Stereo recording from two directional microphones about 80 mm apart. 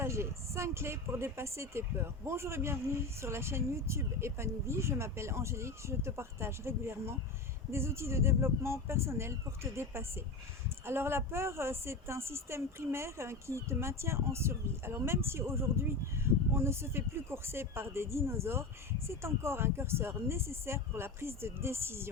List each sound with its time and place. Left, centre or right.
0.0 s a woman's voice: right